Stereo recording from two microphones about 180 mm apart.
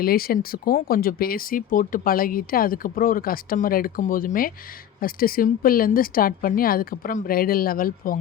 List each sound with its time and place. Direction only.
0.0 s speech: 55° left (ahead or behind)